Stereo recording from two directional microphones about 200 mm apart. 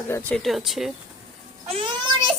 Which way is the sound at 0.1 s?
5° left (ahead or behind).